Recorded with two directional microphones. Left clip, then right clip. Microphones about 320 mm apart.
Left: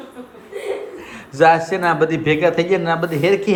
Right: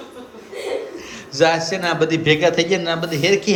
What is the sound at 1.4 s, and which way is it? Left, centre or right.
A man's voice, centre.